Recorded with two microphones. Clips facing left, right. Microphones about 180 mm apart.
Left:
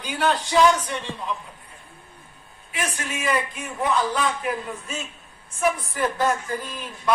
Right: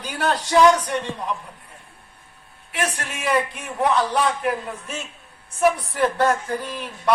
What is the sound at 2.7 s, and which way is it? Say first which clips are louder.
A man's voice: right 3 dB; 65° right (ahead or behind).